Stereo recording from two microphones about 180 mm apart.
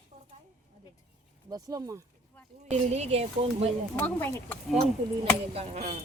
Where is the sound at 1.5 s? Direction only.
20° right (ahead or behind).